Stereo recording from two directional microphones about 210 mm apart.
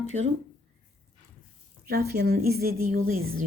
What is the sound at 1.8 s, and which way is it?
Speech, 45° right (ahead or behind).